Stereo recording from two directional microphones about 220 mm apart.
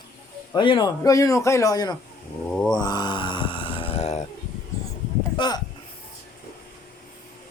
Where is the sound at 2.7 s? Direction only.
20° left (ahead or behind).